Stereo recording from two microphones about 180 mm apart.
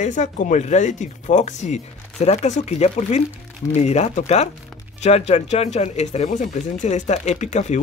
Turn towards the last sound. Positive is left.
turn(degrees=40)  # may be behind; listen again after turning